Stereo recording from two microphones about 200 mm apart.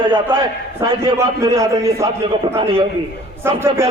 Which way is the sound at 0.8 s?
25° right (ahead or behind).